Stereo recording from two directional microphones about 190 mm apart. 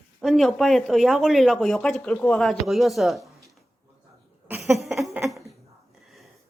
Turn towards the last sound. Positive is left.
turn(degrees=0)  # may be behind; listen again after turning